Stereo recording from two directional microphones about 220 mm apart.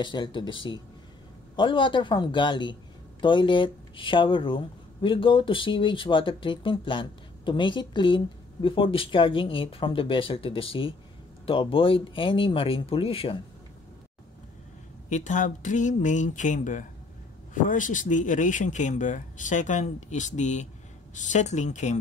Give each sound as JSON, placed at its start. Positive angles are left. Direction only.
{"t": 0.0, "sound": "a man's voice", "side_deg": 20}
{"t": 15.0, "sound": "speech", "side_deg": 35}